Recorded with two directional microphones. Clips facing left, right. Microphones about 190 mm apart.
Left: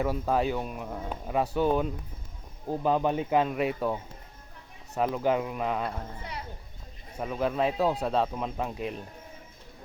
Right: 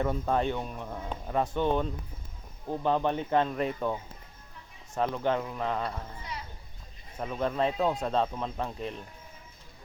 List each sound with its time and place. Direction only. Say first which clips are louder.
0.0 s speech: left 1 dB; 5° left (ahead or behind)
7.2 s speech: left 1 dB; 5° left (ahead or behind)